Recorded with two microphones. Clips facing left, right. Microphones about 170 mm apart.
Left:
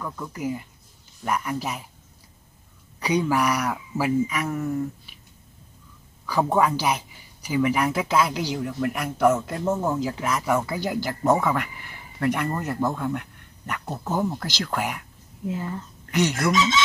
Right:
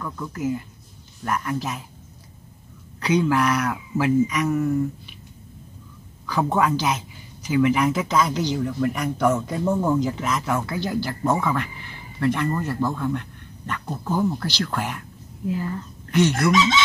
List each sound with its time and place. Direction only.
0.0 s speech: 10° left (ahead or behind)
3.0 s speech: 10° left (ahead or behind)
6.2 s speech: 10° left (ahead or behind)